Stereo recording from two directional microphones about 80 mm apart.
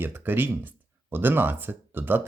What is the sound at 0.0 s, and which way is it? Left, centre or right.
Speech, right.